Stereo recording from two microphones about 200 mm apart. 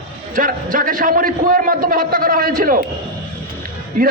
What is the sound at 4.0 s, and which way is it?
Speech, 45° right (ahead or behind).